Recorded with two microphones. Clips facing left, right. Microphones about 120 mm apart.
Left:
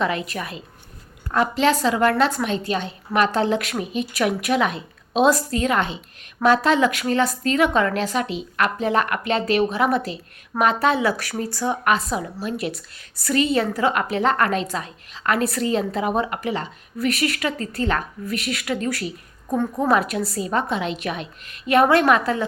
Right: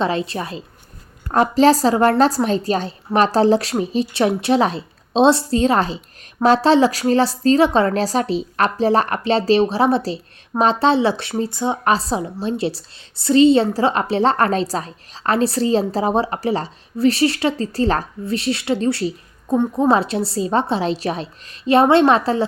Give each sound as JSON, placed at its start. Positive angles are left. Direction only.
{"t": 0.0, "sound": "a woman's voice", "side_deg": -30}